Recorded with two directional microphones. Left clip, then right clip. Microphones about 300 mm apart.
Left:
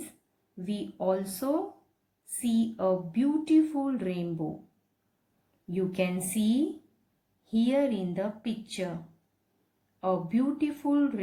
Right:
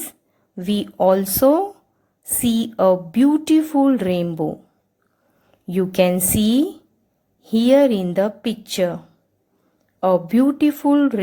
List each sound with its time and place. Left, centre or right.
0.5 s speech: right
5.7 s speech: right
10.0 s speech: right